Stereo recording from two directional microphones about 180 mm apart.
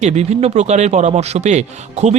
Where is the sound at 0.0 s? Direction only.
35° right (ahead or behind).